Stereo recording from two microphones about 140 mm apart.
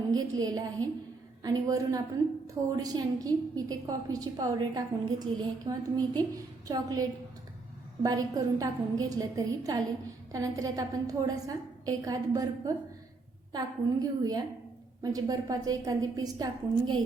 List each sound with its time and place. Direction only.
0.1 s a woman's voice: 25° right (ahead or behind)